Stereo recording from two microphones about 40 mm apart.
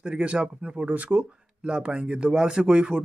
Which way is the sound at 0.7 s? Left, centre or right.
Right.